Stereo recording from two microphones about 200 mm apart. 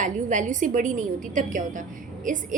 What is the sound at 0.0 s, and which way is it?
A woman's voice, 40° right (ahead or behind).